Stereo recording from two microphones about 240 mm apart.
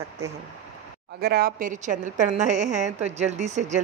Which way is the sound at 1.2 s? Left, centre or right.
Right.